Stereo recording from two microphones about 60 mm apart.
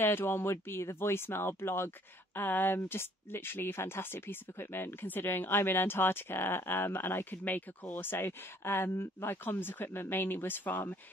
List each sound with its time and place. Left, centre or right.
0.0 s speech: left